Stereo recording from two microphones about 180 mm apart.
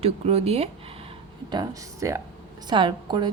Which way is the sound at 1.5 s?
20° right (ahead or behind).